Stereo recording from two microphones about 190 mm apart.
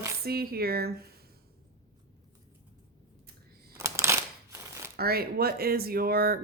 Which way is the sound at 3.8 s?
15° right (ahead or behind).